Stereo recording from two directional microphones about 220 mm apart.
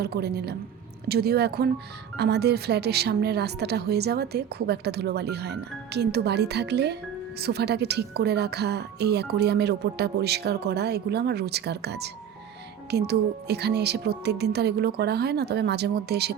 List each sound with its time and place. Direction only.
0.0 s speech: 45° right (ahead or behind)